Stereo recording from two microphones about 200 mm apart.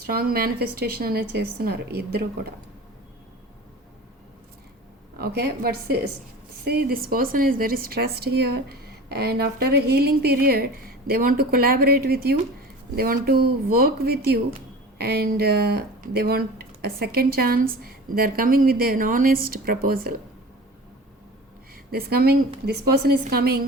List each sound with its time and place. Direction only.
0.0 s speech: 50° right (ahead or behind)
5.1 s speech: 50° right (ahead or behind)
21.8 s speech: 50° right (ahead or behind)